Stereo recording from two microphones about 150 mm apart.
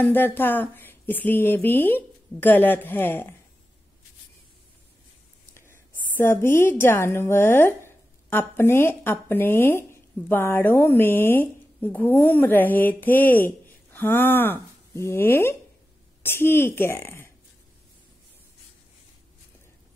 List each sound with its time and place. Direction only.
0.0 s speech: 15° left (ahead or behind)
5.5 s a woman's voice: 15° left (ahead or behind)